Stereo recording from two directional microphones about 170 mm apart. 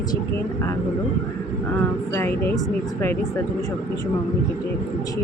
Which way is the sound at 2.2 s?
15° left (ahead or behind).